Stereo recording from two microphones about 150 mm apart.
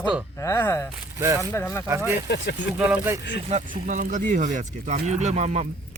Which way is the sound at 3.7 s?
60° right (ahead or behind).